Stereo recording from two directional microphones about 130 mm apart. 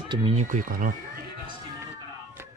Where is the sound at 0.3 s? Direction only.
70° right (ahead or behind); by 1.2 s 90° right.